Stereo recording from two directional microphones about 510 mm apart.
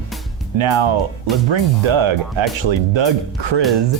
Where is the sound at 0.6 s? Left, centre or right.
Right.